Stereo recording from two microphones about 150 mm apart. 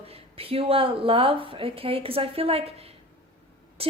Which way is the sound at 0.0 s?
40° right (ahead or behind).